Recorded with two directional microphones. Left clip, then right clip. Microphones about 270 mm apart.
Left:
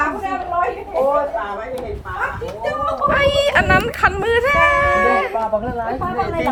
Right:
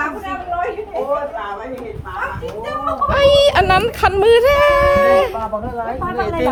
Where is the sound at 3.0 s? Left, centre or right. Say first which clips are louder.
Right 4 dB; right.